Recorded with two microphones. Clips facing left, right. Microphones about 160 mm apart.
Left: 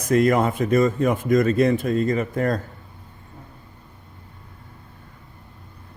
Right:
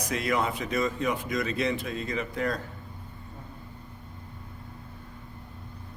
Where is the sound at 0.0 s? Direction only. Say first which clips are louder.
Left 10 dB; 50° left (ahead or behind).